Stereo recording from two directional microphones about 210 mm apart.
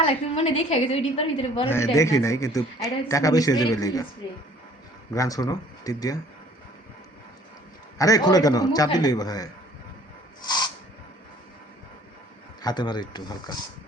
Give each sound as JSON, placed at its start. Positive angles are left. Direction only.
{"t": 0.0, "sound": "a woman's voice", "side_deg": 25}
{"t": 2.0, "sound": "speech", "side_deg": 15}
{"t": 5.1, "sound": "speech", "side_deg": 15}
{"t": 7.9, "sound": "speech", "side_deg": 15}
{"t": 10.4, "sound": "a sound", "side_deg": 20}
{"t": 12.6, "sound": "a woman's voice", "side_deg": 20}